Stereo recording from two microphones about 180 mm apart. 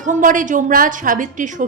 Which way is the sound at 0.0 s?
45° right (ahead or behind).